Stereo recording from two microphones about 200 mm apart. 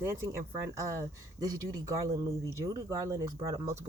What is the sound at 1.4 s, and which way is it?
Speech, 15° right (ahead or behind).